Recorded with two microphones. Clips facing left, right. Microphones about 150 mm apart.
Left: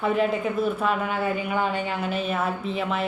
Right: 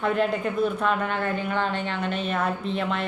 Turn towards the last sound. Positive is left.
turn(degrees=5)  # may be behind; listen again after turning